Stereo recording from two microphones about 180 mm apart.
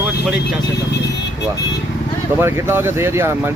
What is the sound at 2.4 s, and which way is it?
Speech, 15° right (ahead or behind).